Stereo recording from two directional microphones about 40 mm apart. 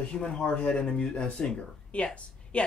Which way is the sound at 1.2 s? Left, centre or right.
Centre.